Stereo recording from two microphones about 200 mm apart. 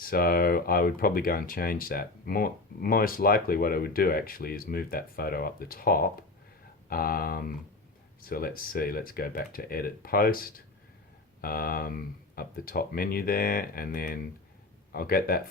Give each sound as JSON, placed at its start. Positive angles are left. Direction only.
{"t": 0.0, "sound": "speech", "side_deg": 45}